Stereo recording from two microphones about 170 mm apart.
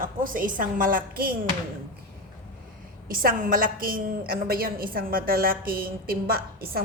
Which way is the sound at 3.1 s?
55° right (ahead or behind).